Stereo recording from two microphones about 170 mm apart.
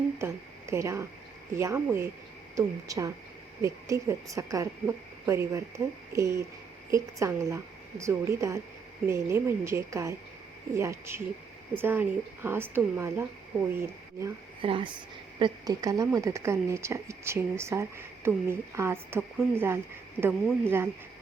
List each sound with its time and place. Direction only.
0.2 s speech: 15° right (ahead or behind)
14.6 s speech: 30° right (ahead or behind); by 20.9 s 15° right (ahead or behind)